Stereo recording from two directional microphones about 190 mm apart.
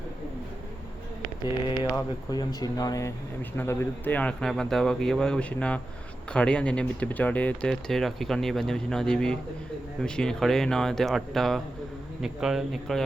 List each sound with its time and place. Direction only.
2.3 s speech: 20° left (ahead or behind); by 13.1 s centre (ahead or behind)